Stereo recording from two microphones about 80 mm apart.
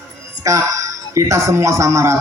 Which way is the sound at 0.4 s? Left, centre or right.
Right.